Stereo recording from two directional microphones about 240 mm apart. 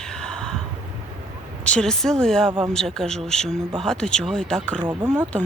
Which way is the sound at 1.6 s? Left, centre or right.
Centre.